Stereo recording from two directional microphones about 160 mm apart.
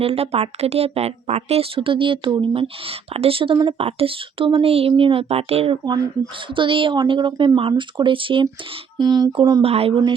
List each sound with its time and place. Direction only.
0.0 s a woman's voice: 35° right (ahead or behind)
9.0 s a sound: 25° right (ahead or behind)
9.6 s a woman's voice: 40° right (ahead or behind)